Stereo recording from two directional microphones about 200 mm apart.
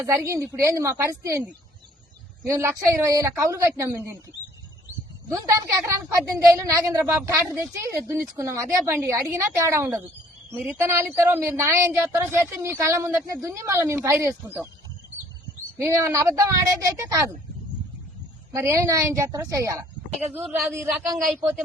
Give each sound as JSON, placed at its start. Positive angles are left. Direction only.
{"t": 0.3, "sound": "a woman's voice", "side_deg": -15}
{"t": 5.5, "sound": "a woman's voice", "side_deg": -15}
{"t": 15.8, "sound": "a woman's voice", "side_deg": -15}
{"t": 18.5, "sound": "a woman's voice", "side_deg": -15}
{"t": 20.3, "sound": "speech", "side_deg": 0}